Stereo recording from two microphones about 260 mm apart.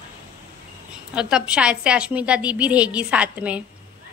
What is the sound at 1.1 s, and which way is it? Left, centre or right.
A woman's voice, centre.